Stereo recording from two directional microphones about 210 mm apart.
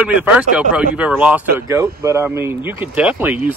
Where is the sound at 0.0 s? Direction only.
5° right (ahead or behind).